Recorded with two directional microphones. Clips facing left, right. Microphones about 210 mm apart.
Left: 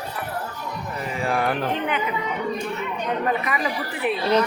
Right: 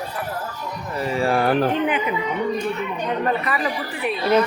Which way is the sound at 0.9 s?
35° right (ahead or behind).